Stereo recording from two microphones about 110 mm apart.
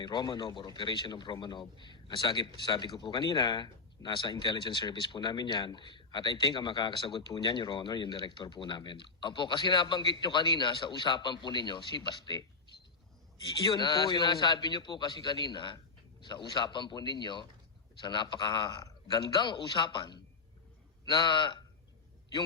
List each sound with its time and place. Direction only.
0.0 s speech: 40° left (ahead or behind)